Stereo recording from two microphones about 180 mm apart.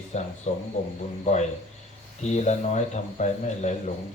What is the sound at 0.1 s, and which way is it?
Speech, 40° left (ahead or behind).